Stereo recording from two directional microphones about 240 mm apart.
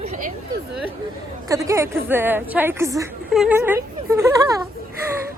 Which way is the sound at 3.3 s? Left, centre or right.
Centre.